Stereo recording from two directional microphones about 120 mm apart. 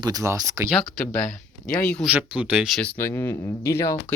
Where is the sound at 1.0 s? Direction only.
90° left.